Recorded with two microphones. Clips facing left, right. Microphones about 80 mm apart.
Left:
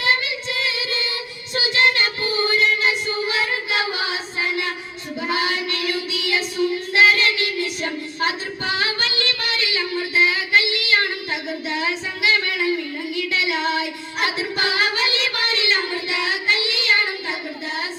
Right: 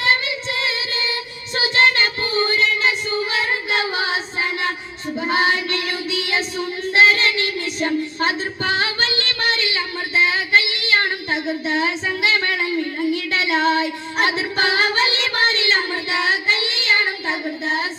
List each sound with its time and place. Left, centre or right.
0.0 s child singing: right